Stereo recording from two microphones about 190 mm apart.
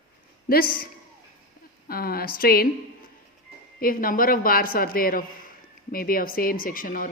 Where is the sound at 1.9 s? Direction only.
50° left (ahead or behind).